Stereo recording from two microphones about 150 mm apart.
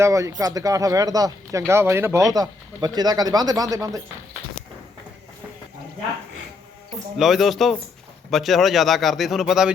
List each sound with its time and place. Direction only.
0.0 s speech: 20° right (ahead or behind)
2.3 s speech: 25° right (ahead or behind)
7.2 s speech: centre (ahead or behind)